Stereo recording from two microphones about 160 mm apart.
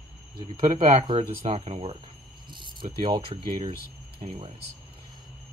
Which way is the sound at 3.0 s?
35° right (ahead or behind).